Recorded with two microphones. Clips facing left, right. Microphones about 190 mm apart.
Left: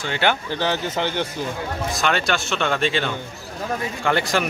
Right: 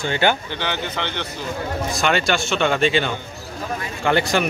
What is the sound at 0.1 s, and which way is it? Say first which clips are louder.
Speech: right 1 dB; centre (ahead or behind).